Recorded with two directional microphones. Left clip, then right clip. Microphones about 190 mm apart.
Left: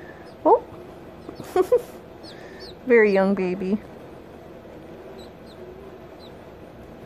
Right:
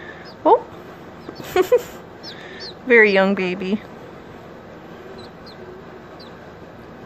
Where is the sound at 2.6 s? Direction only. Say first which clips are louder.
Right 4 dB; 5° left (ahead or behind).